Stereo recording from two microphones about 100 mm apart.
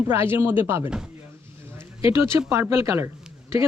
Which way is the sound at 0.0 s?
25° right (ahead or behind).